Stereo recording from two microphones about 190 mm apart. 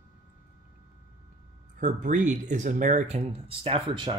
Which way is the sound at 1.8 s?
40° right (ahead or behind).